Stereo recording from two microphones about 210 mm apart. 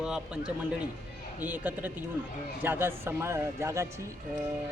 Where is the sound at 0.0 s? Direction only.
5° right (ahead or behind).